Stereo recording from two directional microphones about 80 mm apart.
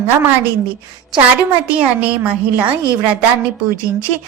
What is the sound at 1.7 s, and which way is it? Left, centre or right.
A woman's voice, centre.